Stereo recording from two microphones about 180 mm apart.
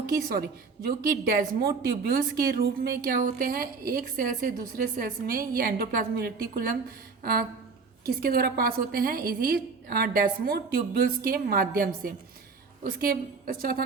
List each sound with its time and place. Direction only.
0.0 s a woman's voice: 55° right (ahead or behind)
7.2 s a sound: 60° right (ahead or behind)
8.0 s a woman's voice: 55° right (ahead or behind)